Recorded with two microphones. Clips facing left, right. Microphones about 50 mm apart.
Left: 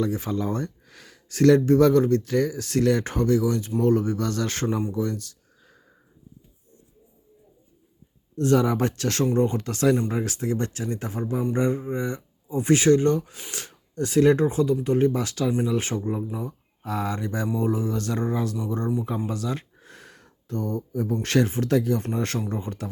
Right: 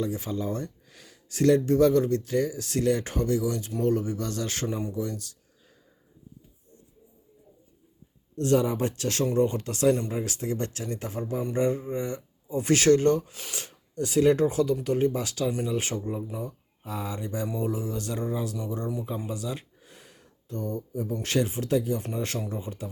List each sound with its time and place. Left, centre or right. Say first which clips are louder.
0.0 s speech: left 4 dB; left
4.8 s a sound: left 4 dB; left
8.4 s speech: left 3 dB; left
8.6 s speech: left 4 dB; left
9.3 s speech: left 2 dB; left
16.8 s speech: left 6 dB; left
19.3 s a sound: left 4 dB; left
21.1 s speech: left 4 dB; left